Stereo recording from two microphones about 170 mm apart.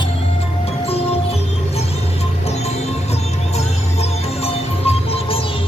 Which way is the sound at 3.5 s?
35° left (ahead or behind).